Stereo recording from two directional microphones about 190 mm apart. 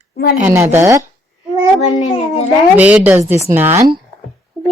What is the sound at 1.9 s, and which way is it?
Speech, 35° left (ahead or behind).